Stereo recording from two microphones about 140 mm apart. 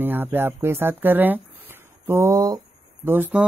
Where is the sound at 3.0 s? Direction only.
15° right (ahead or behind).